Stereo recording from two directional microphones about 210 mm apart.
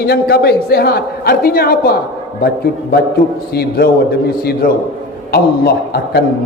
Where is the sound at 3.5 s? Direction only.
50° left (ahead or behind).